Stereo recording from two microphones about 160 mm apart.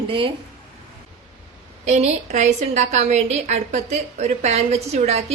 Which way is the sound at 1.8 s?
45° right (ahead or behind).